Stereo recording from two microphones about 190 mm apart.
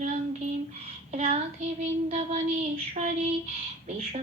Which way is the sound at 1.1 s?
35° right (ahead or behind).